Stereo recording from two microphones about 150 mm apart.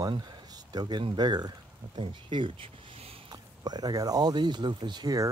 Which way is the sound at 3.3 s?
25° right (ahead or behind).